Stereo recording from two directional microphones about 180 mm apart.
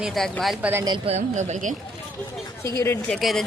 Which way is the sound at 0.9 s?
35° right (ahead or behind).